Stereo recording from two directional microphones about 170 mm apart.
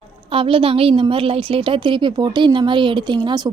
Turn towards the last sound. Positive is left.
turn(degrees=-25)  # may be behind; listen again after turning